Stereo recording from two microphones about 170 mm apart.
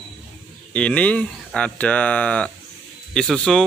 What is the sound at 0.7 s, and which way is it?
Speech, 5° left (ahead or behind).